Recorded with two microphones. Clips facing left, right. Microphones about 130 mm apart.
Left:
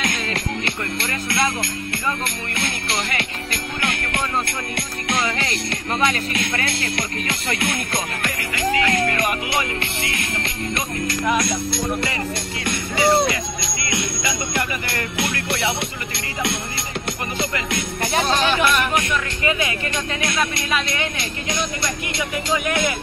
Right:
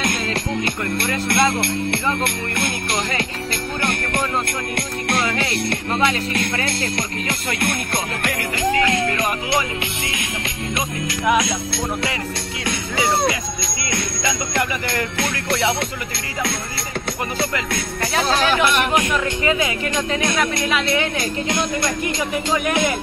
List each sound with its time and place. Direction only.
1.6 s music: 65° right (ahead or behind)
5.9 s speech: 20° right (ahead or behind)
7.2 s music: 55° right (ahead or behind)
8.8 s music: 15° right (ahead or behind)
14.5 s music: 5° left (ahead or behind)
18.6 s speech: 25° right (ahead or behind)